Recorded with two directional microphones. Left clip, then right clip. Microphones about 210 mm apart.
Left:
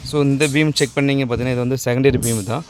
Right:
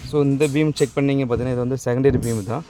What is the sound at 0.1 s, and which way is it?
Speech, 5° left (ahead or behind).